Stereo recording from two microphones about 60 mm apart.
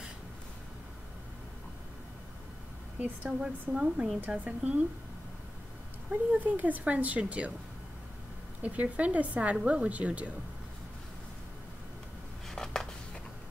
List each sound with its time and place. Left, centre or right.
3.3 s a woman's voice: centre
6.4 s a woman's voice: right
8.6 s a woman's voice: right
12.4 s a sound: centre